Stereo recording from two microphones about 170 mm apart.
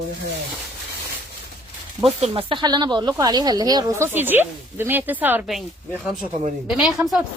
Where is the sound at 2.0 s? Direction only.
35° right (ahead or behind); by 5.4 s 10° right (ahead or behind).